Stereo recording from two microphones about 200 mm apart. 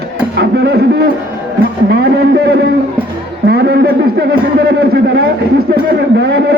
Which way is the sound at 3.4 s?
55° right (ahead or behind).